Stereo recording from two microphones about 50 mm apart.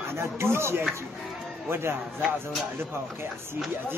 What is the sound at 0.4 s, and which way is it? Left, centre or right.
Speech, right.